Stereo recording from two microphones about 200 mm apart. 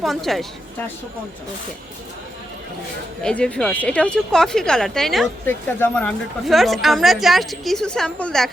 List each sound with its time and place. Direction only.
0.0 s a woman's voice: centre (ahead or behind)
3.2 s a woman's voice: 5° left (ahead or behind)